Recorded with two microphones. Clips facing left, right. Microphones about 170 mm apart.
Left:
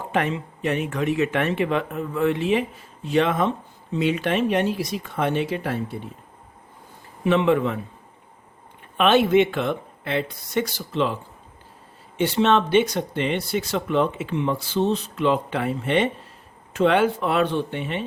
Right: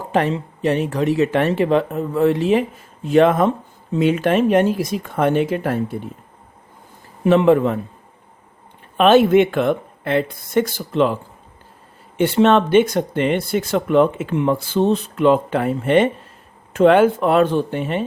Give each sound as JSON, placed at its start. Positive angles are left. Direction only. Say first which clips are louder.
{"t": 0.0, "sound": "speech", "louder": "right 5 dB", "side_deg": -35}
{"t": 7.3, "sound": "speech", "louder": "right 6 dB", "side_deg": -40}
{"t": 9.0, "sound": "speech", "louder": "right 5 dB", "side_deg": -40}